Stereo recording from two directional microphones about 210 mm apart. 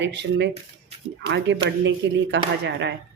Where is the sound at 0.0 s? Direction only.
60° right (ahead or behind).